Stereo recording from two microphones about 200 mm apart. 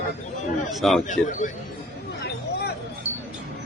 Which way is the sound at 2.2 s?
55° left (ahead or behind).